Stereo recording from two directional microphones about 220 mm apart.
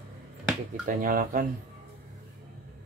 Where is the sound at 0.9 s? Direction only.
40° right (ahead or behind).